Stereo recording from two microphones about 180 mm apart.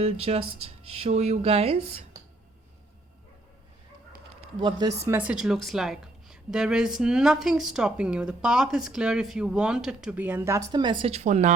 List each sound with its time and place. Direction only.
0.0 s speech: 35° right (ahead or behind)
4.6 s speech: 20° right (ahead or behind)
5.0 s a woman's voice: 10° right (ahead or behind); by 11.5 s 40° right (ahead or behind)